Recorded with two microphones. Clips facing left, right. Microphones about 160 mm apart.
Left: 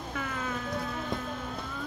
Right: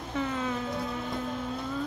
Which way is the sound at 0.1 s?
20° right (ahead or behind).